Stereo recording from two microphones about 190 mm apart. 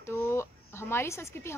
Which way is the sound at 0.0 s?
15° left (ahead or behind).